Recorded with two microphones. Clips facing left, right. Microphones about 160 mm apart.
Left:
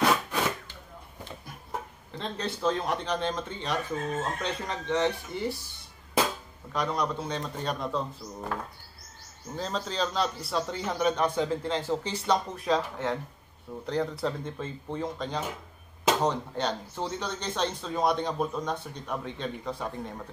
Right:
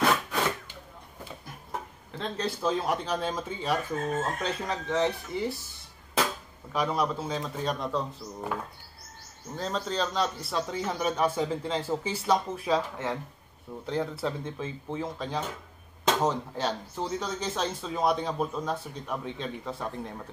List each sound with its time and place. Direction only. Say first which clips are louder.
0.0 s wood: left 1 dB; centre (ahead or behind)
2.1 s speech: right 2 dB; centre (ahead or behind)
6.7 s speech: right 1 dB; 5° right (ahead or behind)
9.6 s speech: right 1 dB; centre (ahead or behind)